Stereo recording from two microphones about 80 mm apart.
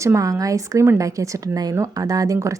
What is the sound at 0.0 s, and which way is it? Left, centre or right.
A woman's voice, right.